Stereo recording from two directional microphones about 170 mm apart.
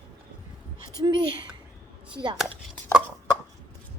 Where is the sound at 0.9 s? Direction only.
25° right (ahead or behind).